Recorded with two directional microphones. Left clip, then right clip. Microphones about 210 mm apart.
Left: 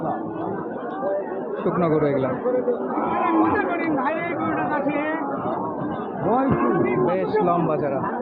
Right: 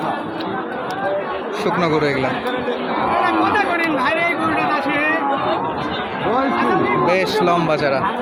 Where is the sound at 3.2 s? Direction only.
Centre (ahead or behind).